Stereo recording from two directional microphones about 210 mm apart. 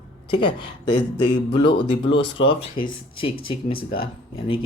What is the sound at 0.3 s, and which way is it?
Speech, 25° left (ahead or behind).